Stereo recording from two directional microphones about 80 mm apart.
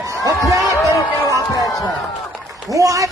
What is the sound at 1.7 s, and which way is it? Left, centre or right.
Speech, centre.